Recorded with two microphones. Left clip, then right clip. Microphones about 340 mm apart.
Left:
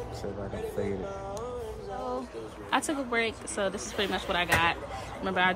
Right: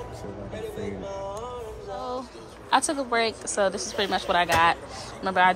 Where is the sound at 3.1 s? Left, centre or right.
Centre.